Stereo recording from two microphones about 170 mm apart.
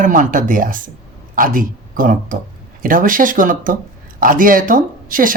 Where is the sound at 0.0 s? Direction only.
50° right (ahead or behind).